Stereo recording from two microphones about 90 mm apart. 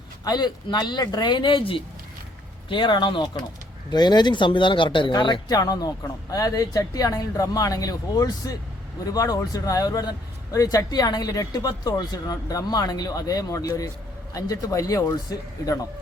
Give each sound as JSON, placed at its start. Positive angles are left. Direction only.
{"t": 0.3, "sound": "a man's voice", "side_deg": 50}
{"t": 2.6, "sound": "a man's voice", "side_deg": 65}